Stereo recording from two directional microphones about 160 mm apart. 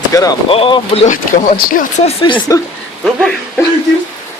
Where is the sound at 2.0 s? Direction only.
30° left (ahead or behind).